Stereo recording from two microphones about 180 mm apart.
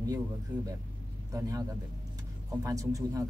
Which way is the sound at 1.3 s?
15° right (ahead or behind).